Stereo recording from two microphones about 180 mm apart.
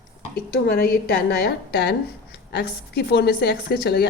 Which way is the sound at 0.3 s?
55° left (ahead or behind).